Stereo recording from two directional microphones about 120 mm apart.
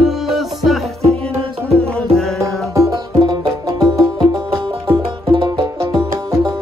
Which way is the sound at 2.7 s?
30° right (ahead or behind).